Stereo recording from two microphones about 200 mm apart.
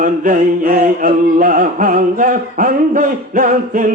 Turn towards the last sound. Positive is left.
turn(degrees=-45)  # may be behind; listen again after turning